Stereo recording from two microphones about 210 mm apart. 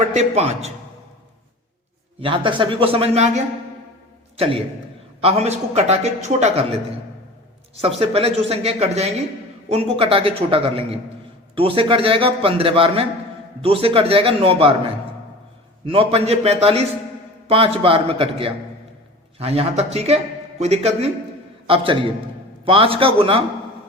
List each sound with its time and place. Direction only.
0.1 s a man's voice: 30° right (ahead or behind)
2.2 s a man's voice: 25° right (ahead or behind)
4.4 s a man's voice: 25° right (ahead or behind)
7.8 s a man's voice: 30° right (ahead or behind)